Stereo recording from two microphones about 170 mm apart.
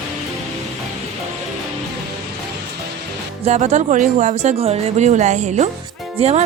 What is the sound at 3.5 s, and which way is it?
Speech, 40° right (ahead or behind).